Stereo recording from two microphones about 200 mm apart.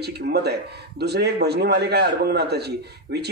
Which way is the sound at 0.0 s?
55° right (ahead or behind).